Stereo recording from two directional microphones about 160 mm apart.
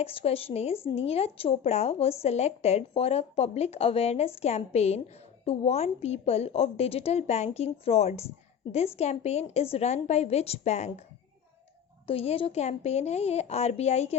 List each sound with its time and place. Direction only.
0.0 s a woman's voice: 35° left (ahead or behind)
12.0 s a woman's voice: 40° left (ahead or behind)